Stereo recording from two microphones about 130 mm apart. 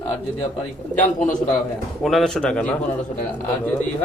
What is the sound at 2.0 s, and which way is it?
Speech, centre (ahead or behind).